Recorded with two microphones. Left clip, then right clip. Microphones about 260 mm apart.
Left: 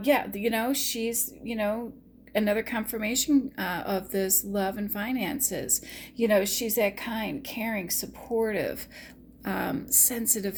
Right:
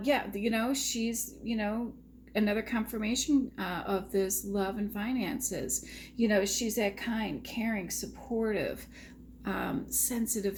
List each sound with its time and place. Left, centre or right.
0.0 s speech: left